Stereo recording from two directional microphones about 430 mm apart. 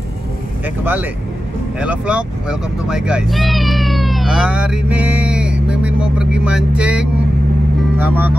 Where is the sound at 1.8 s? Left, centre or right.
Centre.